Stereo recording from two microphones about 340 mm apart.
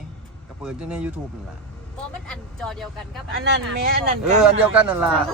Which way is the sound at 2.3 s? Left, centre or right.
Centre.